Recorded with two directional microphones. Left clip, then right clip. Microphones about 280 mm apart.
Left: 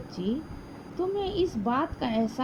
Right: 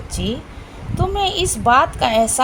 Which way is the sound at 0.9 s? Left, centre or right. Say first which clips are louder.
Right 9 dB; left.